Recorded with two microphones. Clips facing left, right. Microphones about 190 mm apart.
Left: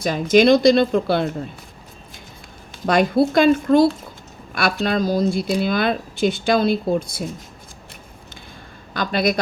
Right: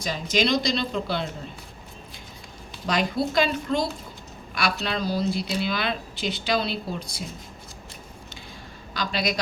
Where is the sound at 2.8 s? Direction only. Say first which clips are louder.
Left 8 dB; 50° left (ahead or behind).